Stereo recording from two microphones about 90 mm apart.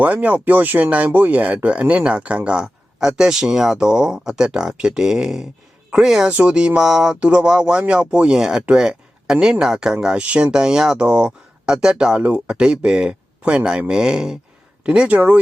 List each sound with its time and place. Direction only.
0.0 s speech: 20° right (ahead or behind)